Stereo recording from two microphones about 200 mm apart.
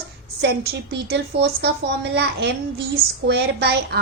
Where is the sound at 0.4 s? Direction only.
55° right (ahead or behind).